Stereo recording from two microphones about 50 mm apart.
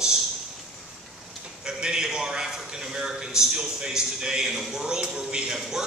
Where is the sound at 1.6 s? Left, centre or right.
Centre.